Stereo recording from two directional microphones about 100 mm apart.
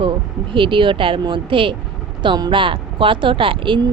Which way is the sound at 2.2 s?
50° right (ahead or behind).